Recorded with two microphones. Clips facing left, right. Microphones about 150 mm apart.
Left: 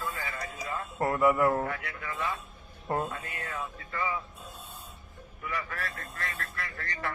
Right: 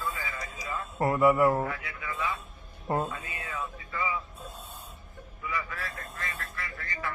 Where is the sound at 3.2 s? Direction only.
65° left (ahead or behind).